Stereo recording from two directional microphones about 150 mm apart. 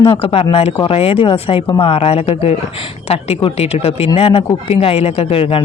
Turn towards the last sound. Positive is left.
turn(degrees=40)  # may be behind; listen again after turning